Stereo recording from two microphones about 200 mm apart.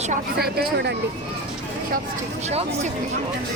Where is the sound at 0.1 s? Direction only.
50° right (ahead or behind).